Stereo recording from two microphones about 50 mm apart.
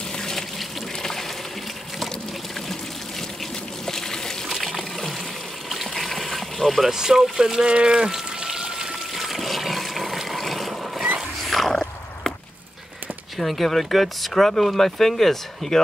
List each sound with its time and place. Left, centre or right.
0.2 s water: centre
3.8 s trickle: centre
5.7 s water: centre
6.9 s speech: centre
9.1 s toilet flush: centre
11.1 s a sound: centre
13.4 s speech: centre